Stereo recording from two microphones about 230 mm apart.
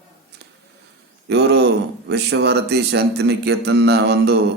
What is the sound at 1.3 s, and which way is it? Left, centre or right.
Speech, right.